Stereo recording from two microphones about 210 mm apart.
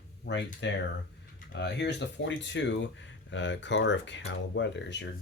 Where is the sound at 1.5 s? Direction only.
55° left (ahead or behind).